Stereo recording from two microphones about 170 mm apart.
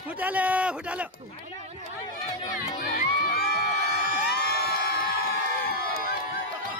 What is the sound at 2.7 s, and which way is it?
Crowd, 65° left (ahead or behind).